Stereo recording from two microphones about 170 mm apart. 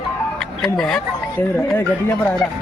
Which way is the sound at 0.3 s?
Centre (ahead or behind).